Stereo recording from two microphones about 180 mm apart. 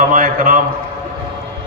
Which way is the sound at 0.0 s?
50° right (ahead or behind).